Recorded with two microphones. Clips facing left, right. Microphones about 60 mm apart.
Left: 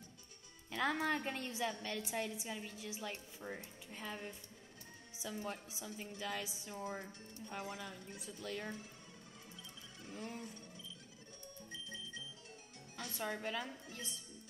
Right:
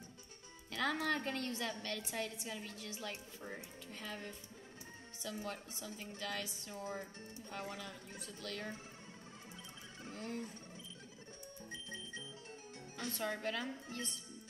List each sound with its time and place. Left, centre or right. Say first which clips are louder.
0.7 s a woman's voice: even; centre
3.9 s a woman's voice: left 1 dB; centre
10.1 s a woman's voice: right 2 dB; centre
13.1 s a woman's voice: right 1 dB; centre